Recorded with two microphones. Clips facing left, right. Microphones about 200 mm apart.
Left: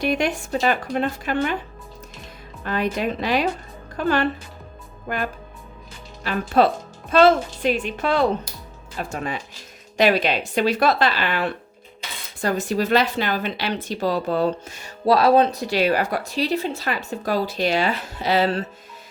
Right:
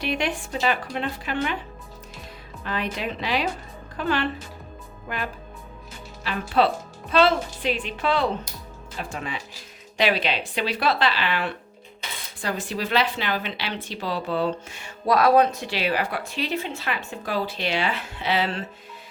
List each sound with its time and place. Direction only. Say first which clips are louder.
0.0 s speech: left 4 dB; 45° left (ahead or behind)
2.6 s speech: left 5 dB; 45° left (ahead or behind); by 15.6 s 30° left (ahead or behind)
15.6 s speech: left 5 dB; 45° left (ahead or behind)